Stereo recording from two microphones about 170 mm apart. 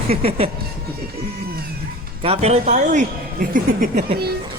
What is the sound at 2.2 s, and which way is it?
Speech, 40° right (ahead or behind).